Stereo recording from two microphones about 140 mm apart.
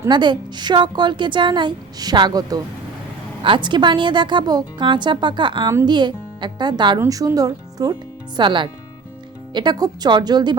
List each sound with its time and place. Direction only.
0.1 s a woman's voice: 35° right (ahead or behind)
7.0 s a woman's voice: 20° right (ahead or behind)